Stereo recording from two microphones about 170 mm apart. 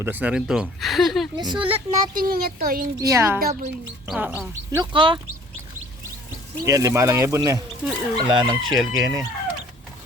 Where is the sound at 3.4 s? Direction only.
60° right (ahead or behind).